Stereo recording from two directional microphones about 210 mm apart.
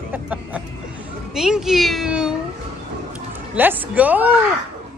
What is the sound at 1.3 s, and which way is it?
A child's voice, 5° right (ahead or behind).